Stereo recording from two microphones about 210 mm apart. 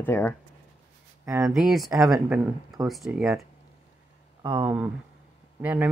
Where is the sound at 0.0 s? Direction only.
10° left (ahead or behind).